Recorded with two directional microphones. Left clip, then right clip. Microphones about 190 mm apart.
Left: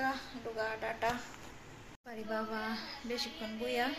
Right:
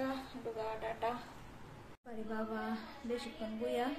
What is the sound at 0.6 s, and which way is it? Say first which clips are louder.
Speech: left 4 dB; centre (ahead or behind).